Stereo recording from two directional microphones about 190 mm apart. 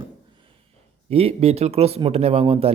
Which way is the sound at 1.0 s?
30° right (ahead or behind).